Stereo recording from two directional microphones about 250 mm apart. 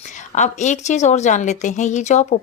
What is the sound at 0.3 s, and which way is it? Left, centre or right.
Speech, left.